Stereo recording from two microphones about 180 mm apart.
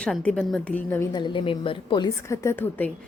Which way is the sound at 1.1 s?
25° left (ahead or behind).